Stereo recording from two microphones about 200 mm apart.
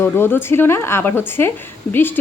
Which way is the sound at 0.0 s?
10° left (ahead or behind).